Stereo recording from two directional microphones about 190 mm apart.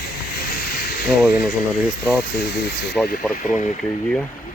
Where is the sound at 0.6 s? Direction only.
55° left (ahead or behind).